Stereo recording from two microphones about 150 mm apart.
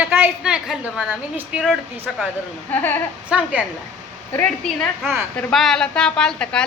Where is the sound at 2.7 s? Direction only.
15° left (ahead or behind).